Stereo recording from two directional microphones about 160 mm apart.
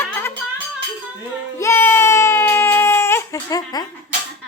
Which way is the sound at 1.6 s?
15° left (ahead or behind).